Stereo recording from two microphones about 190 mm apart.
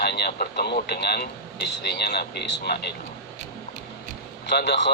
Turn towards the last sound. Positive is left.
turn(degrees=65)  # may be behind; listen again after turning